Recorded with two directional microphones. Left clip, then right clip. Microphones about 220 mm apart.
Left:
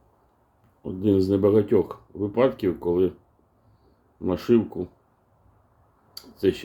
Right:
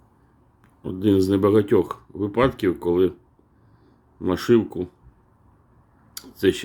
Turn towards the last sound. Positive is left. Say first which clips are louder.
# right 3 dB
turn(degrees=-25)  # may be behind; listen again after turning